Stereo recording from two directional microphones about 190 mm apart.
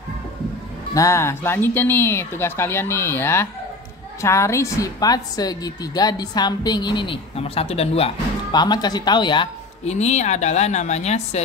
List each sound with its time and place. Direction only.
0.9 s a woman's voice: 15° left (ahead or behind)
9.8 s a woman's voice: 35° left (ahead or behind)